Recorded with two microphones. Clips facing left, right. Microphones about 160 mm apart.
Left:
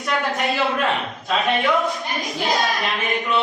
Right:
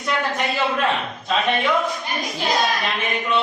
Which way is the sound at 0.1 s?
Centre (ahead or behind).